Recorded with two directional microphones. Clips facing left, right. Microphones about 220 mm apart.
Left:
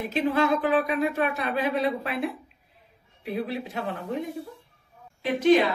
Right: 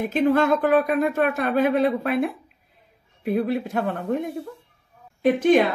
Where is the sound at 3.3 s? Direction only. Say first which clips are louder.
Right 7 dB; 50° right (ahead or behind).